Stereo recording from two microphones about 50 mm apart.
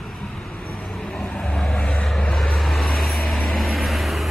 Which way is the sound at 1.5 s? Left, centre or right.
Left.